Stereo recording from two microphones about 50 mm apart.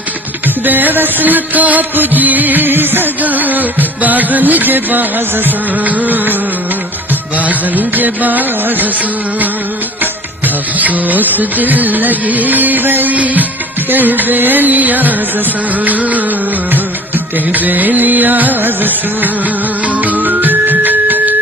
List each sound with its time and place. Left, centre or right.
0.4 s music: right
10.0 s music: right
17.3 s music: right